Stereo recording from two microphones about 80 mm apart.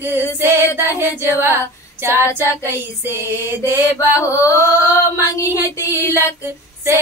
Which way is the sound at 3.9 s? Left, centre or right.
Left.